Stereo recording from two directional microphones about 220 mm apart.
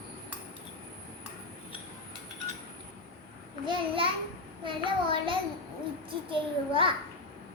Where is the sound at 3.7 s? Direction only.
25° right (ahead or behind).